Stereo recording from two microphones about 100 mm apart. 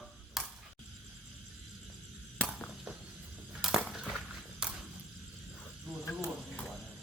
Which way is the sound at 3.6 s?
5° right (ahead or behind).